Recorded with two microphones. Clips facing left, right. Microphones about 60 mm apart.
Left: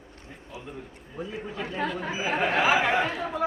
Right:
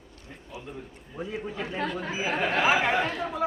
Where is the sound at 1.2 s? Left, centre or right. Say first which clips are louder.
Right 1 dB; centre.